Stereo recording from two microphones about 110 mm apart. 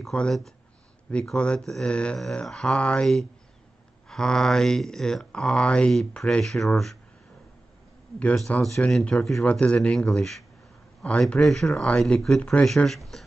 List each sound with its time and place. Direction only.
0.0 s speech: 5° left (ahead or behind)
8.2 s speech: 10° left (ahead or behind)